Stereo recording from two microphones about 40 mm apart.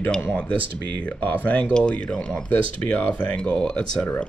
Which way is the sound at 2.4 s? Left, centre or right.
Left.